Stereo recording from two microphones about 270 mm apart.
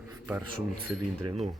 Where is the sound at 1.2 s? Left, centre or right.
Right.